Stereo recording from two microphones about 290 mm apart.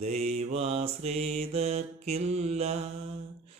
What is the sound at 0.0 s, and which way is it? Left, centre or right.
Mantra, right.